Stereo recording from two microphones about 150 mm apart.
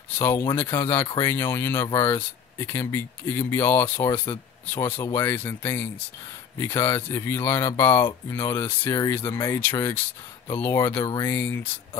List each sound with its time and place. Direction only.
0.2 s speech: 15° left (ahead or behind)